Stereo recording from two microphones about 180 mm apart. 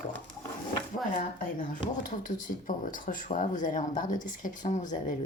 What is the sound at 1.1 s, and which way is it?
Speech, 50° left (ahead or behind).